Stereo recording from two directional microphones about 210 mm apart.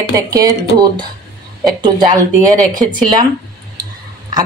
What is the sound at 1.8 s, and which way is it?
Speech, 20° right (ahead or behind).